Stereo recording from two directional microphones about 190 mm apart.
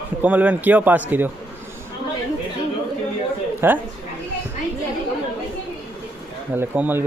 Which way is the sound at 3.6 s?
10° right (ahead or behind).